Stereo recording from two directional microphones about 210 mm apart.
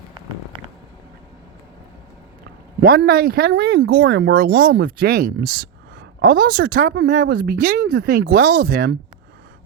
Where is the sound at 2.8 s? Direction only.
50° right (ahead or behind).